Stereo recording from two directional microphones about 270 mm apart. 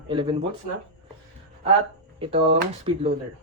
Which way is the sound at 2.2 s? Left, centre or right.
Right.